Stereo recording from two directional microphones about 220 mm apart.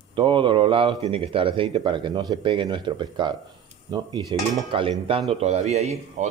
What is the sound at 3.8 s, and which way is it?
Dishes, 20° right (ahead or behind).